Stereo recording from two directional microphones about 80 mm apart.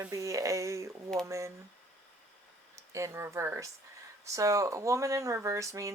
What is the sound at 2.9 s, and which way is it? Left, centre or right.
Speech, right.